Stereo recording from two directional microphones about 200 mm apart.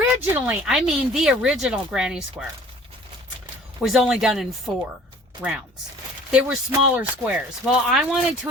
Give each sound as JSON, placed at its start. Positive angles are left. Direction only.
{"t": 0.0, "sound": "speech", "side_deg": -10}
{"t": 3.8, "sound": "speech", "side_deg": 0}